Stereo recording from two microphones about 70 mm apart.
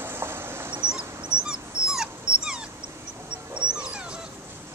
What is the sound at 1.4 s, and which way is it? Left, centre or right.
Dog, centre.